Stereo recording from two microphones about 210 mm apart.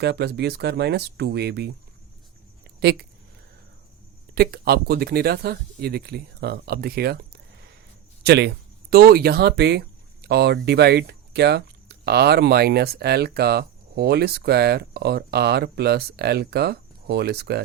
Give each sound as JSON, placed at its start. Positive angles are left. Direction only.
{"t": 0.0, "sound": "speech", "side_deg": -55}
{"t": 4.4, "sound": "speech", "side_deg": -50}
{"t": 8.2, "sound": "speech", "side_deg": -50}